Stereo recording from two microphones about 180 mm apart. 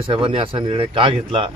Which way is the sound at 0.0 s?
30° right (ahead or behind).